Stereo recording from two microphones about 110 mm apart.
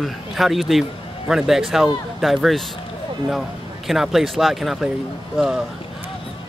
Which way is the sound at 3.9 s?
Centre (ahead or behind).